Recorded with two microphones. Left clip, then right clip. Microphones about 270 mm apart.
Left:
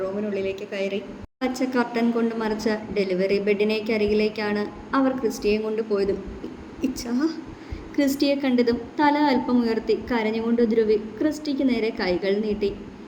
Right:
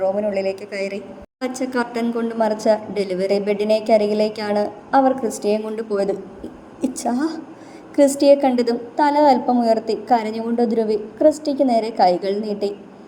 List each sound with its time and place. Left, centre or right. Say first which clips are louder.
0.3 s a woman's voice: right 4 dB; right
1.4 s a woman's voice: right 1 dB; right